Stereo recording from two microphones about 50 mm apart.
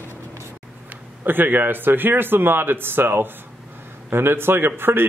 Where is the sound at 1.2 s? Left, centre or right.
Right.